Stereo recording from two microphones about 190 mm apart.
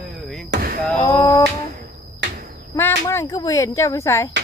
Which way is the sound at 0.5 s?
50° right (ahead or behind).